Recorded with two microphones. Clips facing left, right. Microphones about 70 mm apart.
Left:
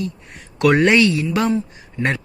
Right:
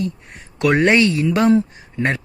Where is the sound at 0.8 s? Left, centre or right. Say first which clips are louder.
Even; right.